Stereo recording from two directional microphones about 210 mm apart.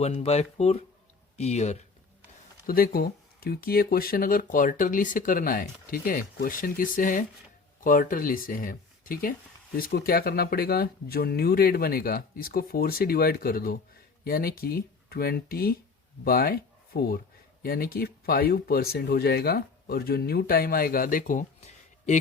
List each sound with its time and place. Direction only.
0.0 s speech: 30° left (ahead or behind)
2.6 s speech: 45° left (ahead or behind)